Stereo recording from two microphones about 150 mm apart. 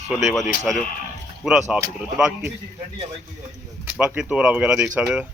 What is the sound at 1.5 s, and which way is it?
Speech, 5° right (ahead or behind).